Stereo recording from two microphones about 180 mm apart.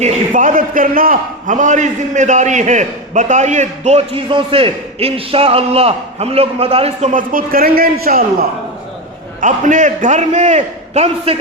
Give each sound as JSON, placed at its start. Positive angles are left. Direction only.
{"t": 0.0, "sound": "a man's voice", "side_deg": -45}
{"t": 9.4, "sound": "a man's voice", "side_deg": -45}